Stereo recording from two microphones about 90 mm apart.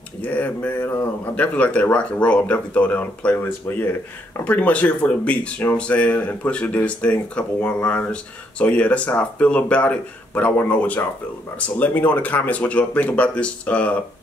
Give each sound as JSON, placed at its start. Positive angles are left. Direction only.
{"t": 0.2, "sound": "speech", "side_deg": 15}